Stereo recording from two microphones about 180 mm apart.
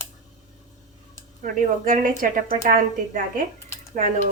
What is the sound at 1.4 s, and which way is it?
A woman's voice, 45° right (ahead or behind).